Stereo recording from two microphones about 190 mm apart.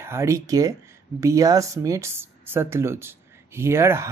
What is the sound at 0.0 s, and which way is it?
Speech, 15° right (ahead or behind).